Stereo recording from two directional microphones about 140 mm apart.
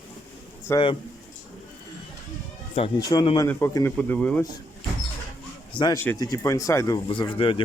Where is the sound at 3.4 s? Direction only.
15° left (ahead or behind).